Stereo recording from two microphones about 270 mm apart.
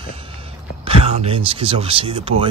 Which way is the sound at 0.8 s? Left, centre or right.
Right.